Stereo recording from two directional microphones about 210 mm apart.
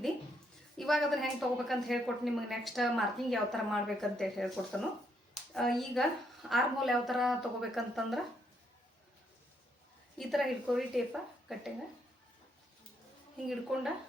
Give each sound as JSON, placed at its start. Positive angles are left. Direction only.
{"t": 0.8, "sound": "a woman's voice", "side_deg": 0}
{"t": 10.2, "sound": "a woman's voice", "side_deg": 0}
{"t": 13.5, "sound": "a woman's voice", "side_deg": 0}